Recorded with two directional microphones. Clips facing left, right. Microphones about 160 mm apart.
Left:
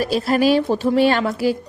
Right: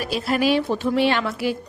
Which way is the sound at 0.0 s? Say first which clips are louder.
Left 4 dB; 40° left (ahead or behind).